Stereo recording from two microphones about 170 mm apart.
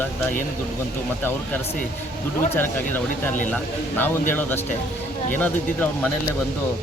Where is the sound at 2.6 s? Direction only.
10° left (ahead or behind).